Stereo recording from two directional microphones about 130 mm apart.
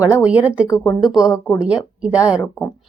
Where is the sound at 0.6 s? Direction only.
25° left (ahead or behind).